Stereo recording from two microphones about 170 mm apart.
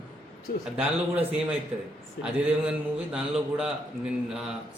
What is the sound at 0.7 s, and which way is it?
A man's voice, 5° right (ahead or behind).